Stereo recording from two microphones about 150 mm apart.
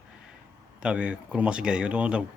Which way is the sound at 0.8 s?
5° right (ahead or behind).